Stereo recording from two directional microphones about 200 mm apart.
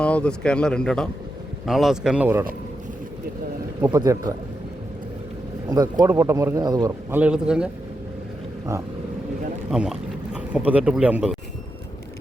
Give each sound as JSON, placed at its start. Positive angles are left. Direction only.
{"t": 0.0, "sound": "speech", "side_deg": 5}
{"t": 3.8, "sound": "speech", "side_deg": -15}
{"t": 5.6, "sound": "speech", "side_deg": -20}
{"t": 7.2, "sound": "speech", "side_deg": -5}
{"t": 9.6, "sound": "speech", "side_deg": -5}